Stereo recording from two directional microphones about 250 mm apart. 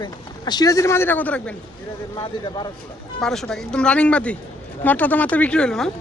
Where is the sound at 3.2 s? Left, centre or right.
Centre.